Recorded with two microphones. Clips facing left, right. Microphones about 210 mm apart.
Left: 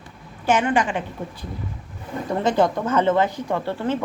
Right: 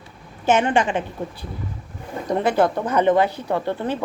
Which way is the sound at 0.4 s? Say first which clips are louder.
Right 2 dB; 25° right (ahead or behind).